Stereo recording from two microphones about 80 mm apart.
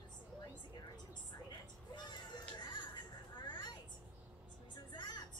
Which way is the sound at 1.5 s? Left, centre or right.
Left.